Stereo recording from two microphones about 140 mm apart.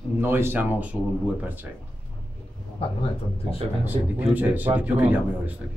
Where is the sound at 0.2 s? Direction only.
15° right (ahead or behind).